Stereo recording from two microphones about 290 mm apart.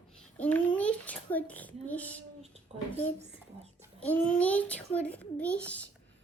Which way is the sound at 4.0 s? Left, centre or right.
Centre.